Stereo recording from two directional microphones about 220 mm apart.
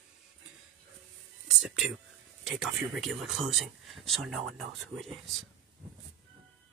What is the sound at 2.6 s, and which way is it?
Speech, centre (ahead or behind).